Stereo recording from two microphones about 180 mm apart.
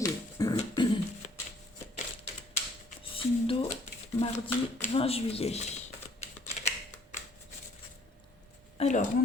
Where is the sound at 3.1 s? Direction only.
30° left (ahead or behind).